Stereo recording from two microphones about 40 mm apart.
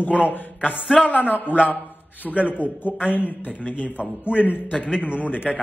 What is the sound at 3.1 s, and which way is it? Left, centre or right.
A man's voice, left.